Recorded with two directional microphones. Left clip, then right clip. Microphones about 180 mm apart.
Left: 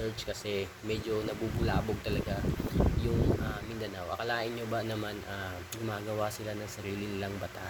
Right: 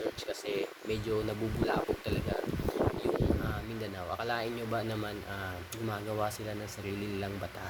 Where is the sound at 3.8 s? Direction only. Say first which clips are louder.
Left 1 dB; 10° right (ahead or behind).